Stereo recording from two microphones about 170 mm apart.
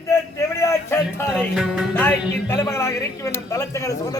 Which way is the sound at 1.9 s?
10° left (ahead or behind).